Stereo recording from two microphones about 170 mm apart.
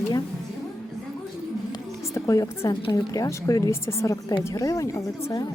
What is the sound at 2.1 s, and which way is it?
A woman's voice, 20° left (ahead or behind).